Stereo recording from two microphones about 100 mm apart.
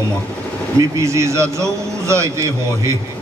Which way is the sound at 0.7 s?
30° right (ahead or behind).